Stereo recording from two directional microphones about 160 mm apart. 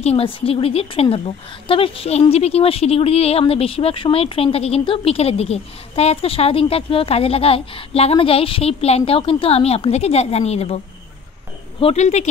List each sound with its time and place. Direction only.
0.0 s a woman's voice: 40° left (ahead or behind)
11.8 s speech: 40° left (ahead or behind)